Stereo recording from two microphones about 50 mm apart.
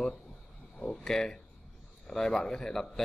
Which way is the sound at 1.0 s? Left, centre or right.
Centre.